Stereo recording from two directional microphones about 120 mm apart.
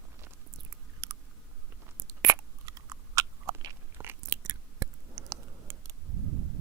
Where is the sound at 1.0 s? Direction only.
25° right (ahead or behind).